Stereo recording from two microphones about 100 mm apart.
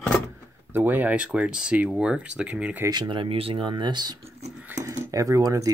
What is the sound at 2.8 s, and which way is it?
Speech, 45° right (ahead or behind).